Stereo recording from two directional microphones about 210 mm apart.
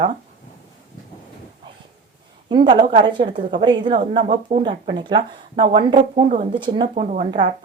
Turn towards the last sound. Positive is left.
turn(degrees=-35)  # may be behind; listen again after turning